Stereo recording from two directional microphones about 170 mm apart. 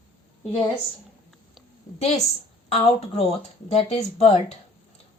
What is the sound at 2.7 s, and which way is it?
Speech, 40° left (ahead or behind).